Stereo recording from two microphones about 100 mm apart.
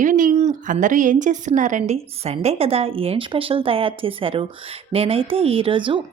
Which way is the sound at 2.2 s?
90° right.